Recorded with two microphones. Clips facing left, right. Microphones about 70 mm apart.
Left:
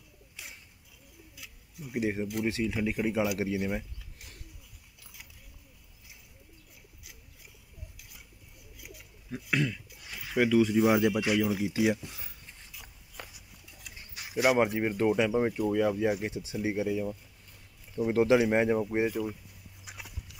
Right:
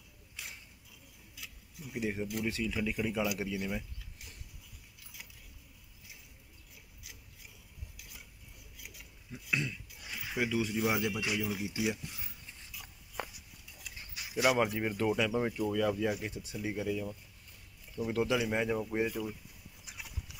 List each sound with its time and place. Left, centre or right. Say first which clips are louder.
1.3 s a sound: right 2 dB; left
2.6 s speech: left 4 dB; left
9.5 s speech: left 5 dB; left
11.3 s speech: left 7 dB; left
12.4 s a sound: even; left
14.3 s speech: left 4 dB; left
16.3 s speech: left 6 dB; centre
17.9 s speech: left 8 dB; left
18.8 s speech: left 4 dB; left
19.0 s speech: left 5 dB; left
19.8 s a sound: left 3 dB; left